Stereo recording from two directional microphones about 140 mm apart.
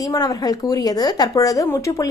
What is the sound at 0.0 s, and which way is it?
Speech, 25° left (ahead or behind).